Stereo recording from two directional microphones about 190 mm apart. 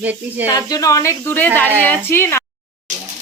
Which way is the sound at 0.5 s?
20° left (ahead or behind).